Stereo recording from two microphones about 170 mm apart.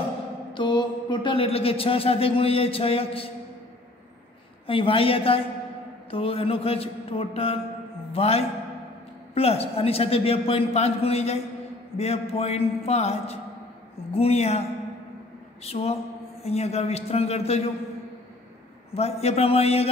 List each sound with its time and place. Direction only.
0.5 s speech: 30° left (ahead or behind)
4.6 s speech: 30° left (ahead or behind)
15.6 s speech: 35° left (ahead or behind)
18.9 s speech: 35° left (ahead or behind)